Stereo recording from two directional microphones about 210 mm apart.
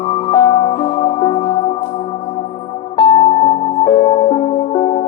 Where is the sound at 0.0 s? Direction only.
25° left (ahead or behind).